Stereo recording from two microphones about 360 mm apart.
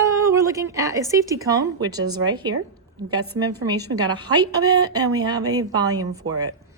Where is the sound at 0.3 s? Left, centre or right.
Centre.